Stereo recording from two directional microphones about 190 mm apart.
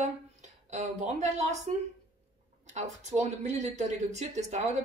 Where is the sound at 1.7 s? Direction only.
35° right (ahead or behind).